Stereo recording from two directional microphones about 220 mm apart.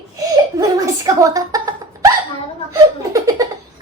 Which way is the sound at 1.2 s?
15° right (ahead or behind).